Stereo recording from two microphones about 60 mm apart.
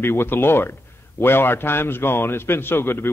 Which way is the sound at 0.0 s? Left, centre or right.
Left.